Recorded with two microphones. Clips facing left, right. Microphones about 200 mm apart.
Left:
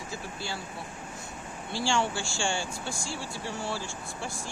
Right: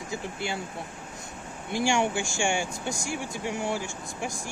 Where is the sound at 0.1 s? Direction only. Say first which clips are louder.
Right 6 dB; 20° right (ahead or behind).